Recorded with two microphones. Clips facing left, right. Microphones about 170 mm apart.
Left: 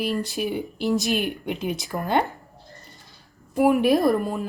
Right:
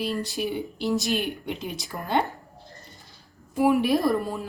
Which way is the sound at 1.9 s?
70° left (ahead or behind).